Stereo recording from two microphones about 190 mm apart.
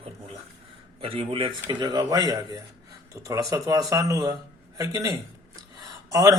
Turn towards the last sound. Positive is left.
turn(degrees=-20)  # may be behind; listen again after turning